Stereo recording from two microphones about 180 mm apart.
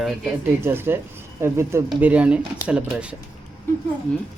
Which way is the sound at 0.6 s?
15° right (ahead or behind).